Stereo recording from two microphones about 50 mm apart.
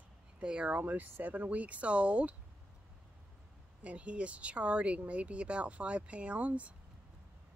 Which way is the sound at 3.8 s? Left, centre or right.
Right.